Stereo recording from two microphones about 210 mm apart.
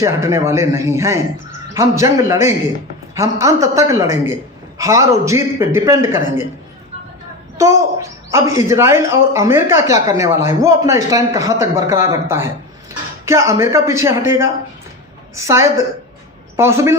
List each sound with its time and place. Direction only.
0.0 s speech: 15° right (ahead or behind)
7.6 s speech: 15° right (ahead or behind)